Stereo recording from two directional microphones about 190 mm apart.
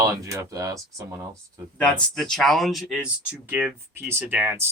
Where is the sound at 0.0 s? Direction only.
15° right (ahead or behind).